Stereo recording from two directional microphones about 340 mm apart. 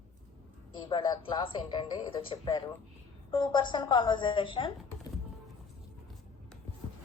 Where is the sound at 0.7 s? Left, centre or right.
Centre.